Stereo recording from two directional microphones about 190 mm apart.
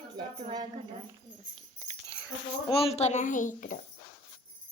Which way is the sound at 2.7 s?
30° left (ahead or behind).